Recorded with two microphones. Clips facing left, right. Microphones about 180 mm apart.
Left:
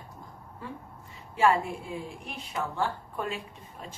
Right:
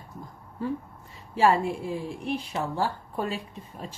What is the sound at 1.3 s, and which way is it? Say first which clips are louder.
A woman's voice: right 2 dB; 35° right (ahead or behind).